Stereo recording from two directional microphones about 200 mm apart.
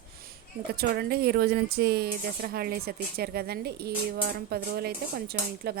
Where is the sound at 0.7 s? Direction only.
50° right (ahead or behind).